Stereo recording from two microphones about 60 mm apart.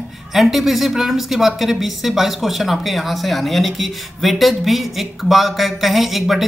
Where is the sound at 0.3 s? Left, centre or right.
Centre.